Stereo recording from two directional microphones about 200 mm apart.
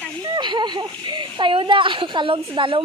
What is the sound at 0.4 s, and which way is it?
Speech, 20° right (ahead or behind).